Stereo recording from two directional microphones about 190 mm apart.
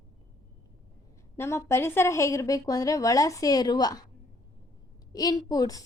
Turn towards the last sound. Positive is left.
turn(degrees=20)  # may be behind; listen again after turning